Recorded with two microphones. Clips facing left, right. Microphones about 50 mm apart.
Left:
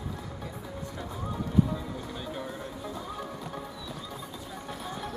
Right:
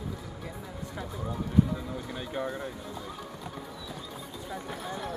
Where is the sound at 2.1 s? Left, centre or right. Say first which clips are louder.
Right 3 dB; centre.